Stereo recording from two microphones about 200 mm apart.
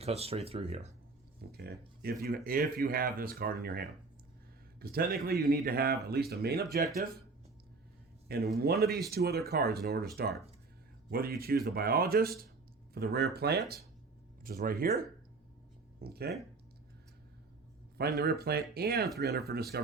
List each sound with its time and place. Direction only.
0.0 s speech: 30° right (ahead or behind)
1.5 s a sound: 50° right (ahead or behind)
2.2 s speech: 45° right (ahead or behind)
8.5 s speech: 50° right (ahead or behind)
11.1 s speech: 50° right (ahead or behind)
16.0 s speech: 50° right (ahead or behind)
17.9 s speech: 55° right (ahead or behind)